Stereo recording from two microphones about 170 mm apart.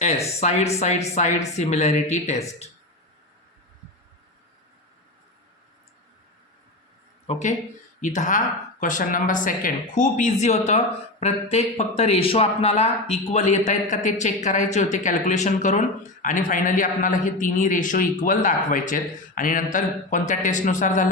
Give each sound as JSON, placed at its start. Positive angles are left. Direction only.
{"t": 0.0, "sound": "speech", "side_deg": 40}
{"t": 7.3, "sound": "a man's voice", "side_deg": 45}